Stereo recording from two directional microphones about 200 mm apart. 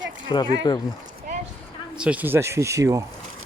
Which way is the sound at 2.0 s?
5° right (ahead or behind).